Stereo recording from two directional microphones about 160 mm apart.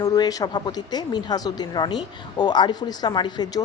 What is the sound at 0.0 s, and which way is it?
A woman's voice, 20° left (ahead or behind).